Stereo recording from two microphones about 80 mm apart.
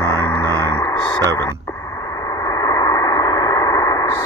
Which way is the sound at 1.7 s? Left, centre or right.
Left.